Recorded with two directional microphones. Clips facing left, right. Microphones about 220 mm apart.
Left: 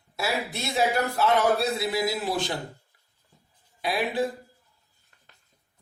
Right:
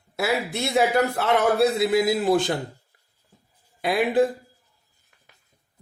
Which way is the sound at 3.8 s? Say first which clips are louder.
Right 6 dB; 55° right (ahead or behind).